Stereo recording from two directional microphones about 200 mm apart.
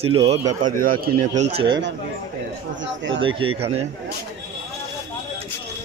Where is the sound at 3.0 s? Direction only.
65° right (ahead or behind).